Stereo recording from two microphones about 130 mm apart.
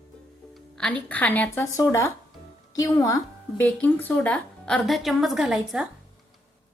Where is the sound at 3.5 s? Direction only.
15° left (ahead or behind); by 5.8 s centre (ahead or behind).